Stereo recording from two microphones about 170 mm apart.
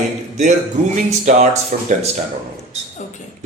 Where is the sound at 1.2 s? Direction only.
45° right (ahead or behind).